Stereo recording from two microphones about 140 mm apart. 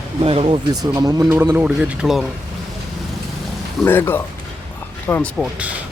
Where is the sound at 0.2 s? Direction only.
45° right (ahead or behind).